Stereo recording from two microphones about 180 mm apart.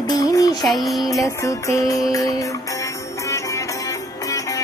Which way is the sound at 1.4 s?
15° left (ahead or behind).